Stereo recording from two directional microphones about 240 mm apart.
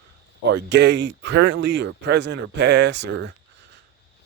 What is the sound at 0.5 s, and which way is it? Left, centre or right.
Speech, right.